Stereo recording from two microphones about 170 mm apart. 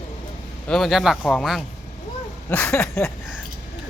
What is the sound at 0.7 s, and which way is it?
Speech, centre (ahead or behind).